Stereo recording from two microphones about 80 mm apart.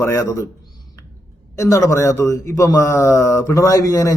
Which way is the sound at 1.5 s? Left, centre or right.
Left.